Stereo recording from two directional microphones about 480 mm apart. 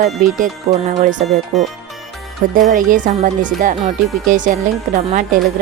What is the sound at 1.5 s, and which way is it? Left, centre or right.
Speech, centre.